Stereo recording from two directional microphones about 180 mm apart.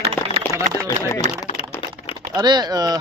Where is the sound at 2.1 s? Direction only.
25° right (ahead or behind).